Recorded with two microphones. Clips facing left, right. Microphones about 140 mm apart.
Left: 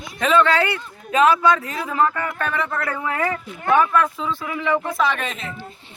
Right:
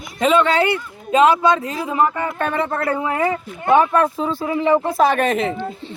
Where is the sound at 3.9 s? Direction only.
35° right (ahead or behind); by 5.5 s 55° right (ahead or behind).